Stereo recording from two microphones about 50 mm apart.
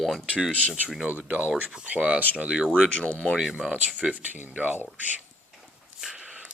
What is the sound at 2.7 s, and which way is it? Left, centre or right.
Speech, left.